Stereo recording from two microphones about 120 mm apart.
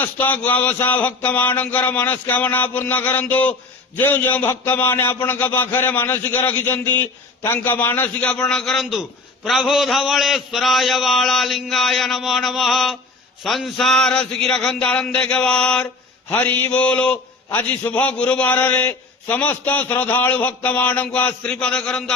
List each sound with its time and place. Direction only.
0.0 s a man's voice: 15° left (ahead or behind)